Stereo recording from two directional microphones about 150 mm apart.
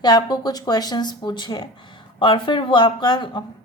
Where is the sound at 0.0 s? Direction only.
25° left (ahead or behind).